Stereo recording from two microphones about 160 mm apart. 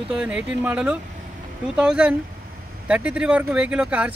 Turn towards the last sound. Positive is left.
turn(degrees=-5)  # may be behind; listen again after turning